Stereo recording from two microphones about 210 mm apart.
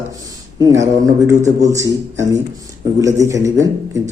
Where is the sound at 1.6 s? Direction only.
15° right (ahead or behind).